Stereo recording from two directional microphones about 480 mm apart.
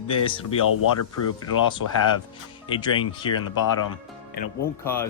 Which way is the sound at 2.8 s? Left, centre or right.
Centre.